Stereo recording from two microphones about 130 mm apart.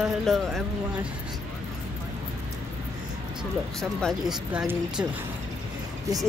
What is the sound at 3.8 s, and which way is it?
Speech, 5° left (ahead or behind).